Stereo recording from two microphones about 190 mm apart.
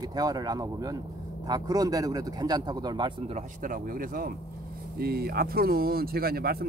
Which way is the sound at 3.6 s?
45° right (ahead or behind).